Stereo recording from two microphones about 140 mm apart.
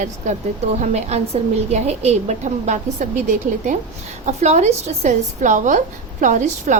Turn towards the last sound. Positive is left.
turn(degrees=-60)  # may be behind; listen again after turning